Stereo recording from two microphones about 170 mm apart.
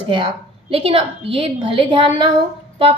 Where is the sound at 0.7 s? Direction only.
35° right (ahead or behind).